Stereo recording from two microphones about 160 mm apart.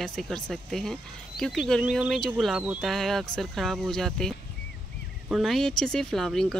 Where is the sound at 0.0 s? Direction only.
Centre (ahead or behind).